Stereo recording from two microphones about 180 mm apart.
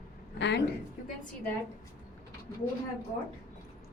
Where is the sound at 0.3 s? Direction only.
75° left (ahead or behind).